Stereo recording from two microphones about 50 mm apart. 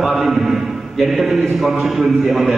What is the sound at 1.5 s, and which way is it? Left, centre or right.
Mantra, centre.